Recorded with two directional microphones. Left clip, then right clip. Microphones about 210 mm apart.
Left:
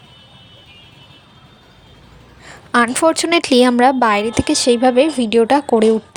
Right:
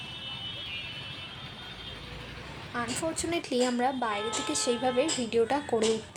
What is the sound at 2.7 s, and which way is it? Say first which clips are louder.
Speech: left 19 dB; 50° left (ahead or behind).